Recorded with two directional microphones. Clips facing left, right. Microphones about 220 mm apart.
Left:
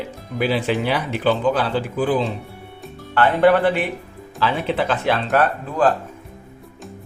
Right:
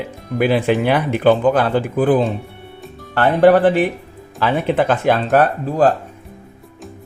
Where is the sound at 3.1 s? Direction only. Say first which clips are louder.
Right 4 dB; 40° right (ahead or behind).